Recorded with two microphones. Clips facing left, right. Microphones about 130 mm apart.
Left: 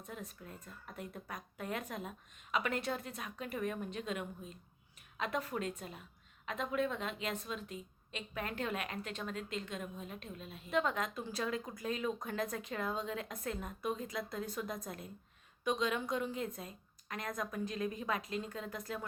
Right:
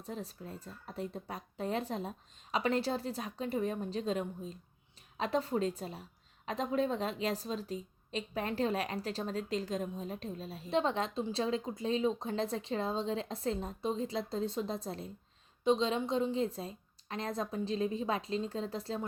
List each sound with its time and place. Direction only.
0.0 s a woman's voice: 30° right (ahead or behind)